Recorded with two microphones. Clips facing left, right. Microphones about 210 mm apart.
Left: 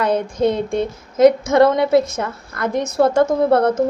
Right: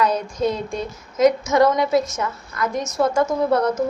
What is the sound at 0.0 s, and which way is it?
Speech, 55° left (ahead or behind).